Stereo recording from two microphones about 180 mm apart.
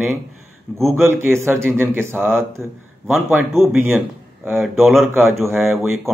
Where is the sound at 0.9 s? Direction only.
15° right (ahead or behind).